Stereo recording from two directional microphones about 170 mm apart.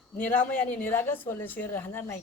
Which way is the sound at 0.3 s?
10° left (ahead or behind).